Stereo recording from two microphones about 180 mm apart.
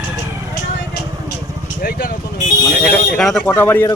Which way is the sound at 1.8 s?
50° left (ahead or behind).